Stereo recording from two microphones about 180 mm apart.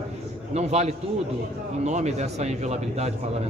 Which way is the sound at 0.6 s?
35° right (ahead or behind).